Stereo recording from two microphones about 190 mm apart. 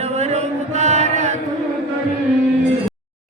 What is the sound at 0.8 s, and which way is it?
Mantra, 35° right (ahead or behind).